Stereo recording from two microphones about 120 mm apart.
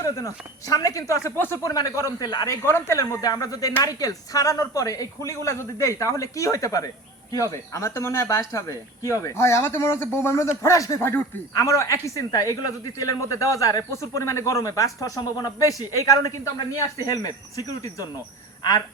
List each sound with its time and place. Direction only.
0.0 s speech: 30° left (ahead or behind)